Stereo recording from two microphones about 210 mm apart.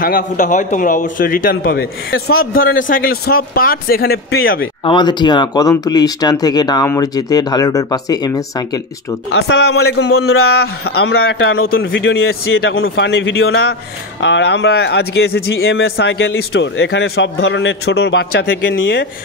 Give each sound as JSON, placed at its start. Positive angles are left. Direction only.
{"t": 0.0, "sound": "a man's voice", "side_deg": 40}
{"t": 4.8, "sound": "speech", "side_deg": 20}
{"t": 9.3, "sound": "speech", "side_deg": 55}
{"t": 10.0, "sound": "speech", "side_deg": 90}
{"t": 11.3, "sound": "speech", "side_deg": 70}
{"t": 18.5, "sound": "speech", "side_deg": 65}